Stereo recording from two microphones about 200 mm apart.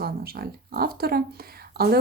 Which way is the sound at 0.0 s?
50° right (ahead or behind).